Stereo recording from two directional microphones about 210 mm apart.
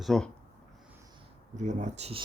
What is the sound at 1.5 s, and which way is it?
Speech, 35° right (ahead or behind).